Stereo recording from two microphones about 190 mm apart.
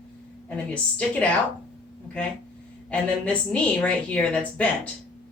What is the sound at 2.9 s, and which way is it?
A woman's voice, 5° left (ahead or behind).